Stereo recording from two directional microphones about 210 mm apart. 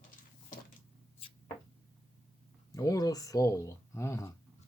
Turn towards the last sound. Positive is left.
turn(degrees=15)  # may be behind; listen again after turning